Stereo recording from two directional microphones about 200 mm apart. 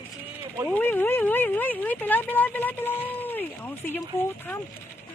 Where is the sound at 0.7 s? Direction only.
10° left (ahead or behind).